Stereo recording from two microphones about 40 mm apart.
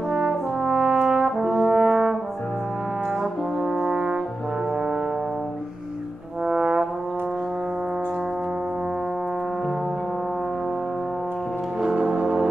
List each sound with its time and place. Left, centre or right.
0.1 s brass instrument: centre
3.8 s brass instrument: right
6.4 s brass instrument: right
11.8 s music: right